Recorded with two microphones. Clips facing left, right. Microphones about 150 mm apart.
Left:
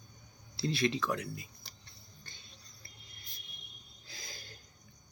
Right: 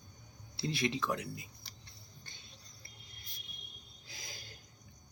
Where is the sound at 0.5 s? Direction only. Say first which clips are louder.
Left 3 dB; 15° right (ahead or behind).